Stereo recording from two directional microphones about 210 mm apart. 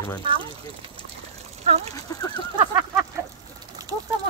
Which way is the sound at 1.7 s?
30° right (ahead or behind).